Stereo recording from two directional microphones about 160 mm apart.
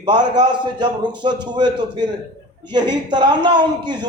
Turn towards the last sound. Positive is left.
turn(degrees=-30)  # may be behind; listen again after turning